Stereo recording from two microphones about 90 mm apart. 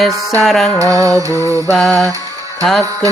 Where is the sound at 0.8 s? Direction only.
40° right (ahead or behind).